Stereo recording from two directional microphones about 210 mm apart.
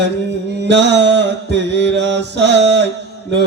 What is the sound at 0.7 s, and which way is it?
Mantra, 55° right (ahead or behind).